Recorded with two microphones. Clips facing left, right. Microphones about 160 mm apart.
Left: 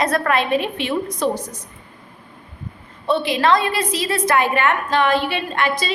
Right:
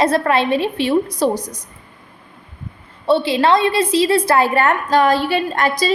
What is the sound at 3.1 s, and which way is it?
A woman's voice, 30° right (ahead or behind).